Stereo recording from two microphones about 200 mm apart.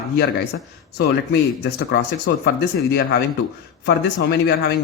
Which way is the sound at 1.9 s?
55° left (ahead or behind).